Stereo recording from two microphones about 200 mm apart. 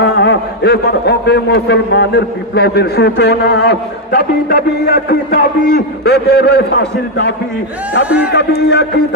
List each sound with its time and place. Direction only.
0.0 s a man's voice: 60° left (ahead or behind)